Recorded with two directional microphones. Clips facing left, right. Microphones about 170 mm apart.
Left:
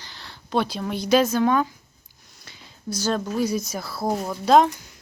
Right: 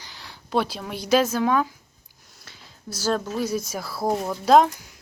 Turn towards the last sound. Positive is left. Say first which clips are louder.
# even
turn(degrees=-5)  # may be behind; listen again after turning